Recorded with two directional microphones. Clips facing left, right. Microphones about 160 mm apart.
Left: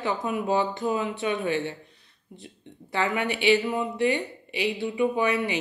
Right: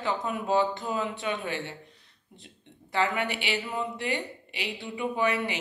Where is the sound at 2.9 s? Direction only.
15° left (ahead or behind).